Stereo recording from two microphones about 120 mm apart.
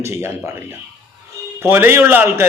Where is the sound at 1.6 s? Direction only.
20° right (ahead or behind).